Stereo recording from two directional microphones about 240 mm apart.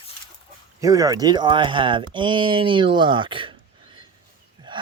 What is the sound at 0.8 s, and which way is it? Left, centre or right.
Speech, centre.